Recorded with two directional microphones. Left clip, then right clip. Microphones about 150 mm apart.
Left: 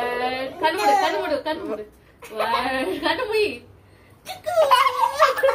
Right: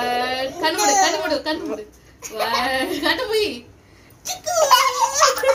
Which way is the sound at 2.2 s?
5° left (ahead or behind).